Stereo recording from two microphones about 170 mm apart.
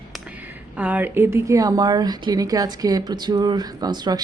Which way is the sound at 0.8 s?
10° right (ahead or behind).